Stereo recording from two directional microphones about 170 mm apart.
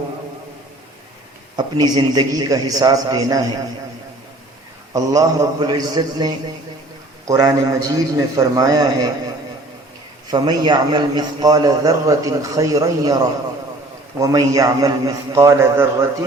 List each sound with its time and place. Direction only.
1.5 s a man's voice: 25° right (ahead or behind)
4.9 s a man's voice: 20° right (ahead or behind)
10.3 s a man's voice: 25° right (ahead or behind)